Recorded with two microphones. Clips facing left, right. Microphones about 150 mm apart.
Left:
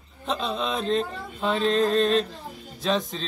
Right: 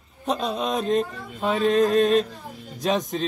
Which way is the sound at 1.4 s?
10° right (ahead or behind).